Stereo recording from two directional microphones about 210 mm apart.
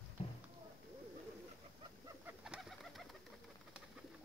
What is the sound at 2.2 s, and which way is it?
Bird, 5° right (ahead or behind).